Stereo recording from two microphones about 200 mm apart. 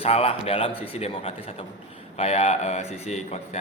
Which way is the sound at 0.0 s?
30° left (ahead or behind).